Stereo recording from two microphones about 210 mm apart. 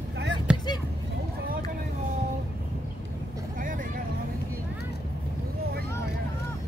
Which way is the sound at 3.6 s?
40° right (ahead or behind).